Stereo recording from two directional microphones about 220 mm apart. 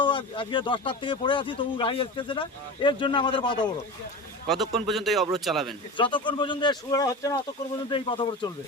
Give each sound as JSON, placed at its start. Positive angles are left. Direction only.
{"t": 0.0, "sound": "speech", "side_deg": 20}
{"t": 4.4, "sound": "speech", "side_deg": 0}
{"t": 6.0, "sound": "speech", "side_deg": 20}